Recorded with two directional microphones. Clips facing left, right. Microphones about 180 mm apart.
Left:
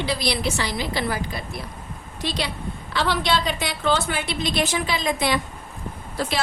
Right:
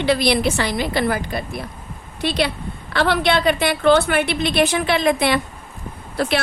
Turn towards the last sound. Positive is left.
turn(degrees=-65)  # may be behind; listen again after turning